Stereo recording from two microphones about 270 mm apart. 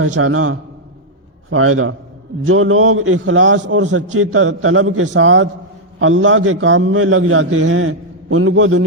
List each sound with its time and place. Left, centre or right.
0.2 s a man's voice: right